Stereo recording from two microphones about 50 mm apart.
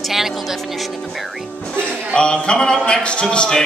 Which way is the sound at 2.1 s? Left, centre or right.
Centre.